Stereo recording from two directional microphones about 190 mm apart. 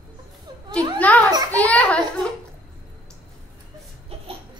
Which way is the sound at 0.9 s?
10° left (ahead or behind).